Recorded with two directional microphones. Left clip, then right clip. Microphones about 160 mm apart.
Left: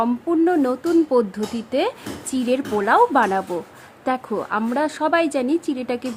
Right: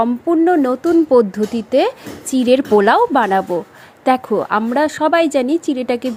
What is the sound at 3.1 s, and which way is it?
Speech, 30° right (ahead or behind).